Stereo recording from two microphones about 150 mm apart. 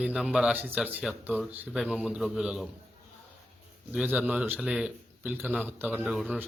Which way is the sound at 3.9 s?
10° right (ahead or behind).